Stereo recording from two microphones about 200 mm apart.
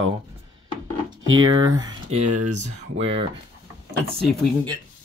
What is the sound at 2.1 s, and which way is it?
Speech, 35° right (ahead or behind).